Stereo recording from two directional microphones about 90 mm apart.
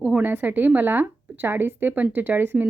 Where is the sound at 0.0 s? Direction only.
15° right (ahead or behind).